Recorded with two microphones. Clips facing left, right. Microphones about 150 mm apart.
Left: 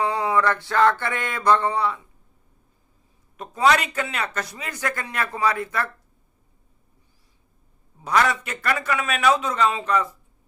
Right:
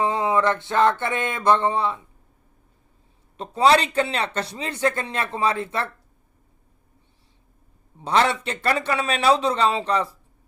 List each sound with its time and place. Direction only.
0.0 s speech: 20° right (ahead or behind)
3.3 s speech: 30° right (ahead or behind)
8.0 s speech: 30° right (ahead or behind)